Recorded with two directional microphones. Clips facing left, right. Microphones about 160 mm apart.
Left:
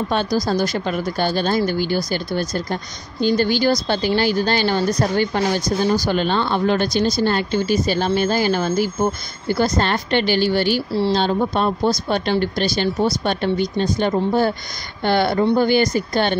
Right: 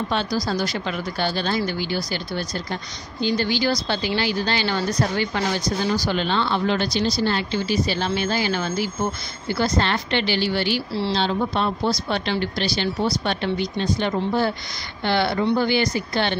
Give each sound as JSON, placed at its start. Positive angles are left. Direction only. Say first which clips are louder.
{"t": 0.1, "sound": "speech", "louder": "left 5 dB", "side_deg": 45}